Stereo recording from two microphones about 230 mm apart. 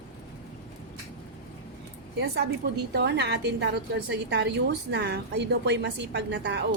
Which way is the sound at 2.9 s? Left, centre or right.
Right.